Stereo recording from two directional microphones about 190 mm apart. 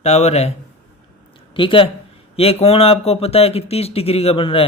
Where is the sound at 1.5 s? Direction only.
25° left (ahead or behind).